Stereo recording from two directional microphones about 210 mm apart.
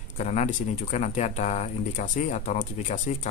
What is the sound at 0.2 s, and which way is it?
Speech, 35° left (ahead or behind).